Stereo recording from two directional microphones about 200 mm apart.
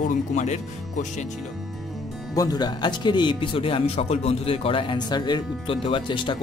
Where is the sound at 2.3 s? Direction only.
20° left (ahead or behind).